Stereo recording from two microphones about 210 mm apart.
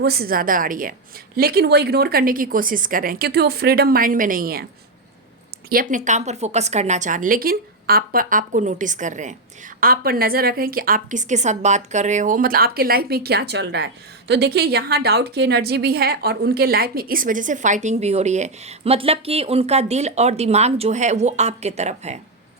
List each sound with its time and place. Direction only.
0.0 s a woman's voice: 45° right (ahead or behind)
5.6 s a woman's voice: 40° right (ahead or behind)